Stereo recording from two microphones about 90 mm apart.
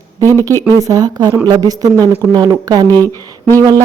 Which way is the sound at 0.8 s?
40° right (ahead or behind).